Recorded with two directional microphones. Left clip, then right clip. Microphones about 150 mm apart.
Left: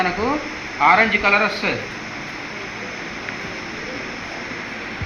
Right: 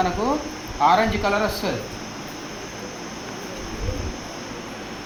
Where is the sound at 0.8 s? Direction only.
30° right (ahead or behind).